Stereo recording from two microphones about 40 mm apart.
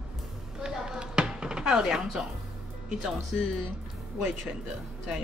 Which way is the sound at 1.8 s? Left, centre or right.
Centre.